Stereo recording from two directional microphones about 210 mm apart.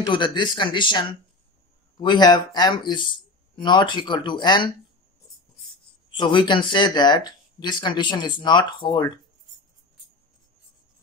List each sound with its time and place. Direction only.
0.0 s speech: 20° left (ahead or behind)
6.1 s speech: 20° left (ahead or behind)